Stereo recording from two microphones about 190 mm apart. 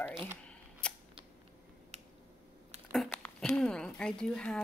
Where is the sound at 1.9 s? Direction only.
35° right (ahead or behind).